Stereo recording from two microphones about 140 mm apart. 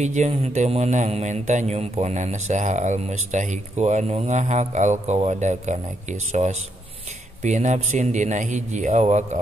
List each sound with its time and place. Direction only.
0.0 s mantra: 55° right (ahead or behind)